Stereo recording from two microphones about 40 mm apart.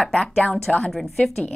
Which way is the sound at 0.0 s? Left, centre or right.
Centre.